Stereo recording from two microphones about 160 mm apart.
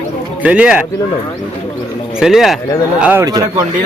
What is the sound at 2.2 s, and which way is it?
Speech, centre (ahead or behind).